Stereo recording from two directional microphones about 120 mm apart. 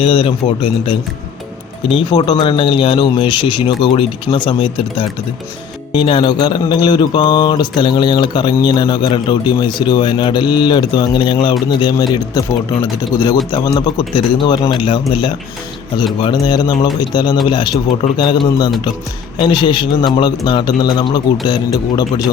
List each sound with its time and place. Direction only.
0.0 s speech: 50° left (ahead or behind)
1.9 s speech: 40° left (ahead or behind)
12.3 s speech: 25° left (ahead or behind)